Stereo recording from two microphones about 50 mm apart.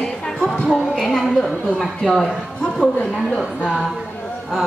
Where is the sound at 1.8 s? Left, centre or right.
Centre.